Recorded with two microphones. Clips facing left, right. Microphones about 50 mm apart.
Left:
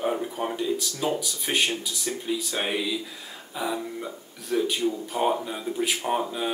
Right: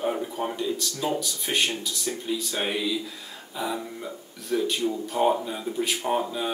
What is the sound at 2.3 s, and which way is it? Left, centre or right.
Speech, centre.